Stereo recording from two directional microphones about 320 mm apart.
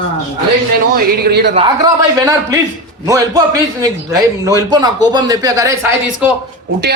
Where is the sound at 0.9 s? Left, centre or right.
Right.